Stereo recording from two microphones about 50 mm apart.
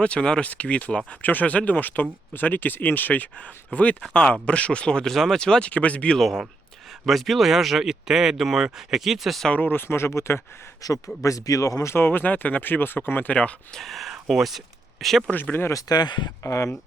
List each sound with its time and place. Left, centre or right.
0.0 s speech: left
5.0 s speech: centre
5.4 s speech: centre
7.0 s speech: centre
9.6 s speech: left
11.2 s speech: left
11.9 s speech: left
13.7 s speech: centre
15.9 s speech: left
16.4 s speech: left